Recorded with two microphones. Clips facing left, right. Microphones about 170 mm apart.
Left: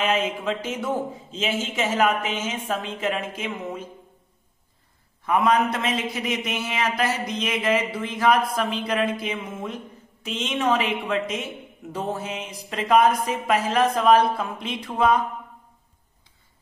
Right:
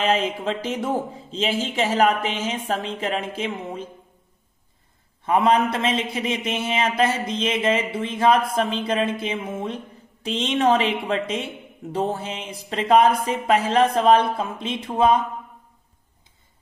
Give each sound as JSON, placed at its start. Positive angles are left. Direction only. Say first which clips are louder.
{"t": 0.0, "sound": "speech", "louder": "right 2 dB", "side_deg": -35}
{"t": 5.2, "sound": "a man's voice", "louder": "right 2 dB", "side_deg": -30}